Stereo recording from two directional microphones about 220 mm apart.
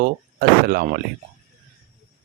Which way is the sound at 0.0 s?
45° right (ahead or behind).